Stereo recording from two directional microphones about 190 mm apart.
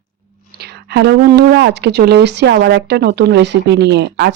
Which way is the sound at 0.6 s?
60° right (ahead or behind).